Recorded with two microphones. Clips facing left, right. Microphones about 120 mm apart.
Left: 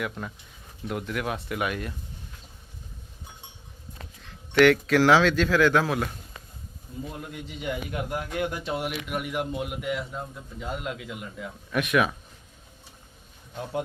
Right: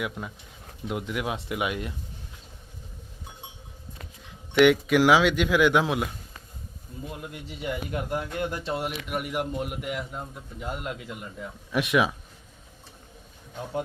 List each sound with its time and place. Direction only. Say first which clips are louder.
0.2 s speech: even; 10° right (ahead or behind)
4.2 s speech: even; 15° right (ahead or behind)
7.2 s a man's voice: even; 5° right (ahead or behind)
11.7 s speech: even; 20° right (ahead or behind)